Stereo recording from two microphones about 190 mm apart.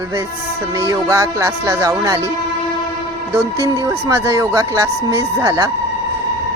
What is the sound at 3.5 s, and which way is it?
Speech, 20° right (ahead or behind).